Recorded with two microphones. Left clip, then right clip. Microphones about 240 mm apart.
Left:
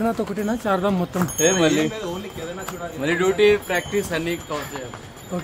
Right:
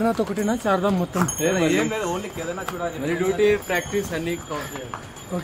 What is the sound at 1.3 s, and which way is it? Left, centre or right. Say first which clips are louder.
Speech: left 5 dB; left.